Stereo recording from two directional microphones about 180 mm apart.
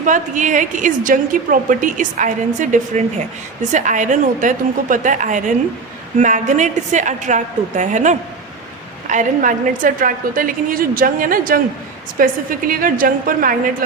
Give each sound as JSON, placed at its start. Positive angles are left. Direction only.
{"t": 0.0, "sound": "a woman's voice", "side_deg": -45}